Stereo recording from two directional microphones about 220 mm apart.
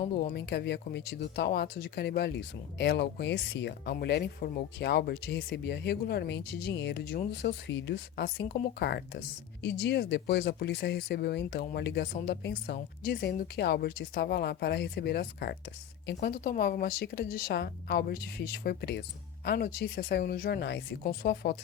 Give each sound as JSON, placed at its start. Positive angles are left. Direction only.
{"t": 0.2, "sound": "speech", "side_deg": 45}